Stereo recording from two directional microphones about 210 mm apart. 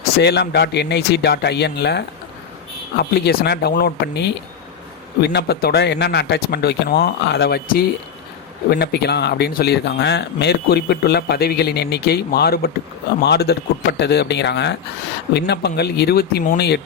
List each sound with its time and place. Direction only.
0.2 s speech: 50° left (ahead or behind)